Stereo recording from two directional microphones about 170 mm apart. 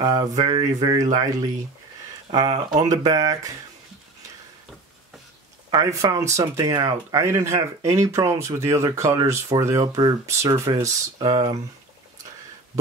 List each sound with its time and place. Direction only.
0.0 s speech: 25° right (ahead or behind)
5.7 s speech: 20° right (ahead or behind)